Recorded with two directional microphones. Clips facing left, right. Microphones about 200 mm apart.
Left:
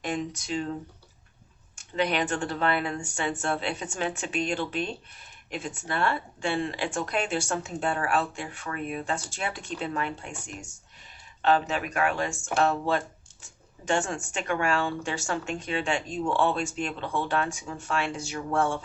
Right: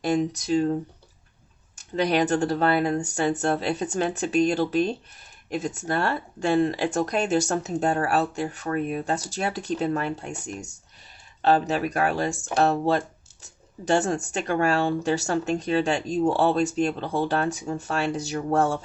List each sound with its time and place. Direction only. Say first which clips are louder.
0.0 s speech: right 7 dB; 40° right (ahead or behind)